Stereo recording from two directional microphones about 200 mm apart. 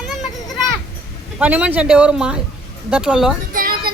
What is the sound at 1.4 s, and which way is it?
Speech, 5° right (ahead or behind).